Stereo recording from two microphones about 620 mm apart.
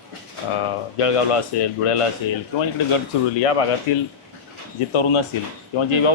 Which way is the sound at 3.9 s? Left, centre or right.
Left.